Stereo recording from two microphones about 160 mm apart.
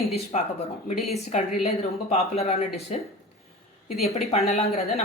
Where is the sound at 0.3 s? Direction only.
45° left (ahead or behind).